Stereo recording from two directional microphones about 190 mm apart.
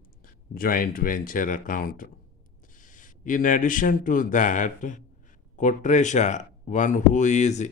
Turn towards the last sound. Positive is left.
turn(degrees=40)  # may be behind; listen again after turning